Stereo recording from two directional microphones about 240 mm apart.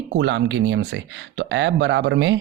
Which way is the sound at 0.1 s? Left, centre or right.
Right.